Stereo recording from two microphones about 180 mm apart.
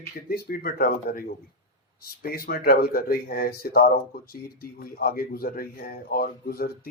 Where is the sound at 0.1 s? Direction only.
55° left (ahead or behind).